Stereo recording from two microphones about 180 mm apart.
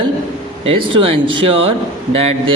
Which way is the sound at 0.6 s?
30° right (ahead or behind).